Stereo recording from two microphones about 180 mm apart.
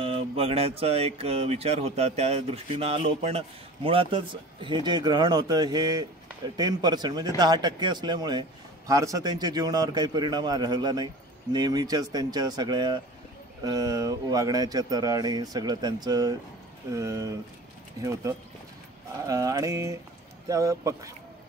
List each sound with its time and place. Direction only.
0.0 s speech: 30° right (ahead or behind)
19.2 s speech: 20° right (ahead or behind)